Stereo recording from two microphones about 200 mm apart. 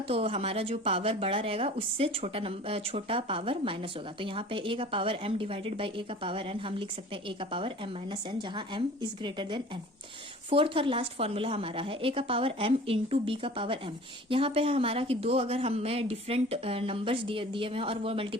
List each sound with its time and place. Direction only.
0.1 s speech: 30° right (ahead or behind)